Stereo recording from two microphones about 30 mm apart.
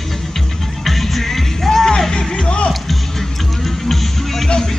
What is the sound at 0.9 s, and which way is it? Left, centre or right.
Music, centre.